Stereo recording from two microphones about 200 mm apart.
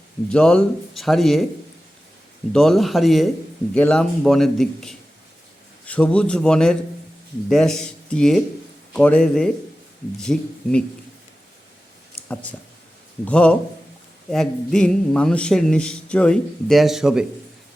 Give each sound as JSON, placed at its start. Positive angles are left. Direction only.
{"t": 0.3, "sound": "speech", "side_deg": 5}
{"t": 2.5, "sound": "speech", "side_deg": 0}
{"t": 12.3, "sound": "a man's voice", "side_deg": 5}